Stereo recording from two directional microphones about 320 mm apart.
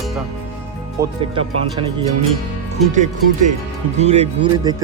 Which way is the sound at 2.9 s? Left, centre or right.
Right.